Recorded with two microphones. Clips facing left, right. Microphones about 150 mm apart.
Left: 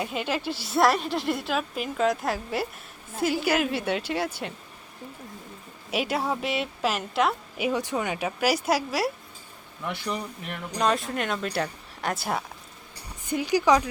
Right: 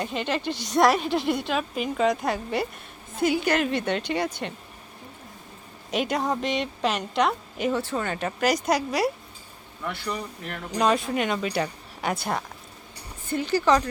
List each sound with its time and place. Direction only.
0.0 s a woman's voice: 5° left (ahead or behind)
5.9 s a woman's voice: 5° left (ahead or behind)
9.9 s speech: 15° left (ahead or behind)
10.8 s a woman's voice: centre (ahead or behind)